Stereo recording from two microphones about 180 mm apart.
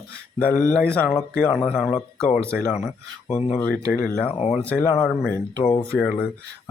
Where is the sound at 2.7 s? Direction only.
35° left (ahead or behind).